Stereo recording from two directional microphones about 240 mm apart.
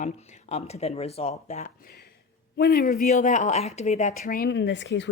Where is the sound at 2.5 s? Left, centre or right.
Left.